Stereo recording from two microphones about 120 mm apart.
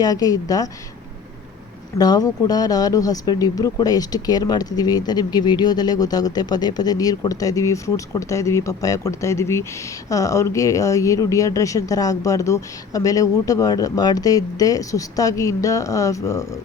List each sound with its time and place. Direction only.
0.0 s speech: 30° left (ahead or behind)
2.0 s speech: 30° left (ahead or behind)